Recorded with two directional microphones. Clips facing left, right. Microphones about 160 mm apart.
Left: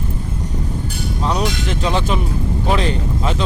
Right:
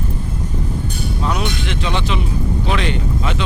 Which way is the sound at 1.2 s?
35° left (ahead or behind).